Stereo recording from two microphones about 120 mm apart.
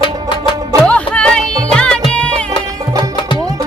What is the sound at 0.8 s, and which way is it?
Music, 10° left (ahead or behind).